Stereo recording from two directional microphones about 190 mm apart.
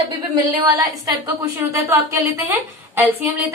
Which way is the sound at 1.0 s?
15° right (ahead or behind).